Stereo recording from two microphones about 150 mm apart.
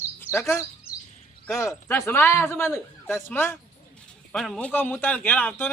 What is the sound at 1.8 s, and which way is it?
Speech, 15° left (ahead or behind).